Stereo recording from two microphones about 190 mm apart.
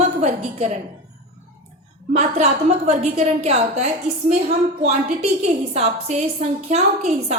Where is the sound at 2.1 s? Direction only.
35° right (ahead or behind).